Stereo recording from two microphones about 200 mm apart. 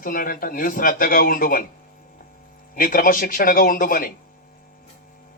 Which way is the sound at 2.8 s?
45° left (ahead or behind).